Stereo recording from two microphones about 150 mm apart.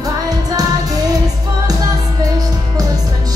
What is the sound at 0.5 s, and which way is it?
Music, 25° right (ahead or behind).